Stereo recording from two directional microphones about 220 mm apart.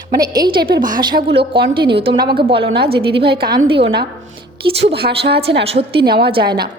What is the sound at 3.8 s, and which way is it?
A woman's voice, 45° right (ahead or behind).